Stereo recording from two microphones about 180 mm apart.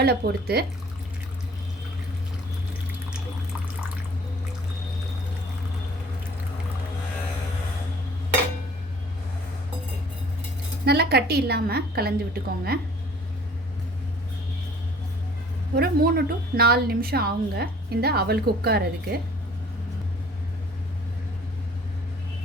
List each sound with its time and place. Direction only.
0.0 s a woman's voice: 60° right (ahead or behind)
10.8 s a woman's voice: 60° right (ahead or behind)
15.7 s a woman's voice: 55° right (ahead or behind)